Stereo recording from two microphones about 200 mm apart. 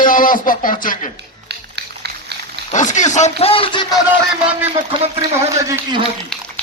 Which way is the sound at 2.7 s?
40° left (ahead or behind).